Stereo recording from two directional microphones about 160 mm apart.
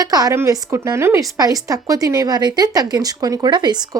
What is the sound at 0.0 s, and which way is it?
A woman's voice, 25° right (ahead or behind).